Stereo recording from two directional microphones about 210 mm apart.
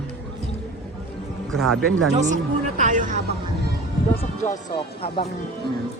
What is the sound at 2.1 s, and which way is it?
Music, 35° right (ahead or behind).